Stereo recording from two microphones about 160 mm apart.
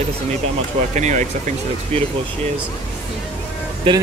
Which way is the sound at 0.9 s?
50° right (ahead or behind).